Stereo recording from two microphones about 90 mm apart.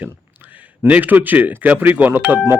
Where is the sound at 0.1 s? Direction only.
20° right (ahead or behind).